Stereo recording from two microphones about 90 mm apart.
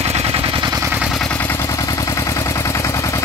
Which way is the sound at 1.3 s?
25° left (ahead or behind).